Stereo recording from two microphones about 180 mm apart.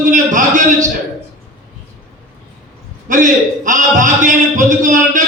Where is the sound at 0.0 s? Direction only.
45° right (ahead or behind).